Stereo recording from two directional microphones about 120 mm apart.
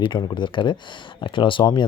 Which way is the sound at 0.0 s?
40° left (ahead or behind).